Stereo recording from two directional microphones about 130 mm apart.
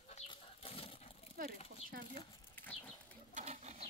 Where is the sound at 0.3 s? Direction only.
45° left (ahead or behind).